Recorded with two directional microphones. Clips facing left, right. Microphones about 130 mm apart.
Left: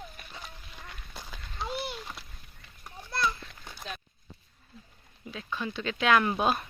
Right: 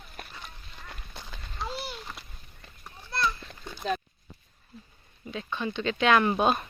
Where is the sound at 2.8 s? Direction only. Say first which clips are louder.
Right 1 dB; 10° left (ahead or behind).